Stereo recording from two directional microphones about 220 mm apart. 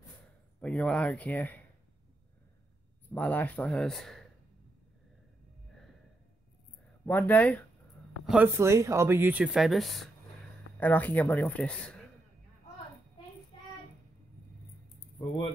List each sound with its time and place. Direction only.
0.6 s speech: 5° left (ahead or behind)
3.1 s speech: 5° left (ahead or behind)
7.1 s speech: 10° left (ahead or behind)
8.3 s speech: 10° right (ahead or behind)
15.0 s music: 25° left (ahead or behind)